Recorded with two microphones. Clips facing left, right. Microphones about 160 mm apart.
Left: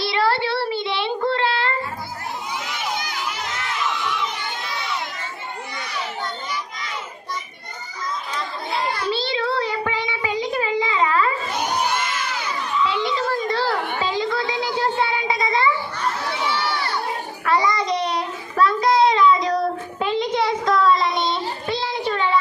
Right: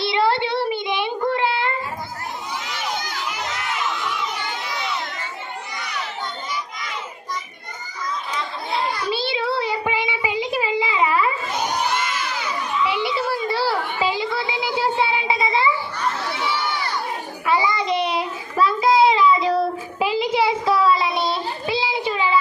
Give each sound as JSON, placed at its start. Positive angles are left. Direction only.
{"t": 0.0, "sound": "child singing", "side_deg": -20}
{"t": 9.0, "sound": "child singing", "side_deg": -15}
{"t": 12.9, "sound": "children playing", "side_deg": -10}
{"t": 14.0, "sound": "a sound", "side_deg": -10}
{"t": 15.4, "sound": "children playing", "side_deg": -10}
{"t": 17.4, "sound": "child singing", "side_deg": -5}